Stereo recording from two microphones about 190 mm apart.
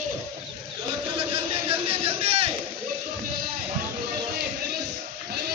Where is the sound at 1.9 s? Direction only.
30° right (ahead or behind).